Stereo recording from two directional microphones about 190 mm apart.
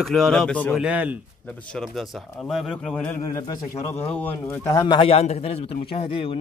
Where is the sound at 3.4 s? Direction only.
20° left (ahead or behind).